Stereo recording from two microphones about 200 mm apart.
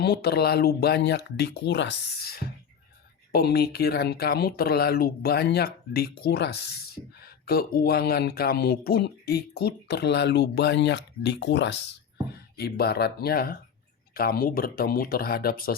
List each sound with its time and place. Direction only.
0.0 s speech: 55° left (ahead or behind)